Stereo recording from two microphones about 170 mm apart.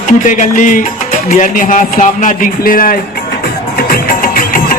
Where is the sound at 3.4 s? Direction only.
60° left (ahead or behind).